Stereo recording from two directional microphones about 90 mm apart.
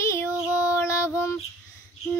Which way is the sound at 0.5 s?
35° left (ahead or behind).